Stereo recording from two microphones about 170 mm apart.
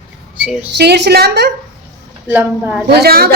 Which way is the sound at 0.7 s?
80° right.